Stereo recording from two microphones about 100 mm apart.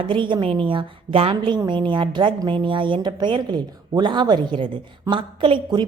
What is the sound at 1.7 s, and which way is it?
A woman's voice, 50° right (ahead or behind).